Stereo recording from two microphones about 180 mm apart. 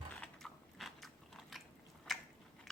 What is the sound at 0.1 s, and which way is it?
Biting, 5° left (ahead or behind).